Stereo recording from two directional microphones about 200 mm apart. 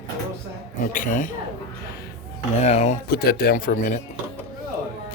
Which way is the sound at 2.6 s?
30° left (ahead or behind).